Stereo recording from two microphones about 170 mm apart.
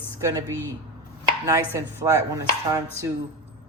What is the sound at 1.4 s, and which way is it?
Chopping, 15° right (ahead or behind).